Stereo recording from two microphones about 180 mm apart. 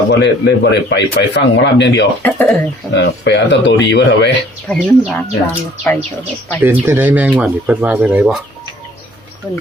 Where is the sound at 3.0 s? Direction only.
80° left.